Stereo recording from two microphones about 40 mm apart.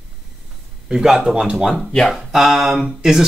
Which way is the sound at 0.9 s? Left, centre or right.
Centre.